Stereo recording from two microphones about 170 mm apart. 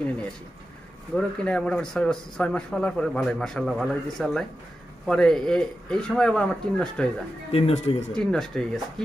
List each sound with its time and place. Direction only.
1.1 s a man's voice: 5° left (ahead or behind)
7.5 s speech: 35° left (ahead or behind)
8.1 s a man's voice: 5° left (ahead or behind)